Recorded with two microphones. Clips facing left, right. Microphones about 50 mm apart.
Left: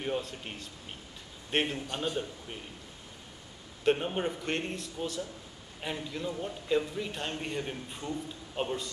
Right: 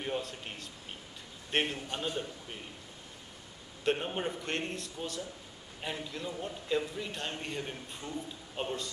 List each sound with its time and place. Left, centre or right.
0.0 s a man's voice: centre
3.8 s a man's voice: centre